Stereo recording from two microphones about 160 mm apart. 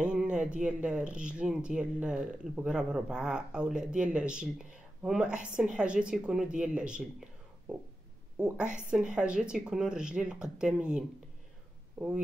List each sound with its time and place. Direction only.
0.0 s speech: 5° right (ahead or behind)
8.4 s speech: 5° right (ahead or behind)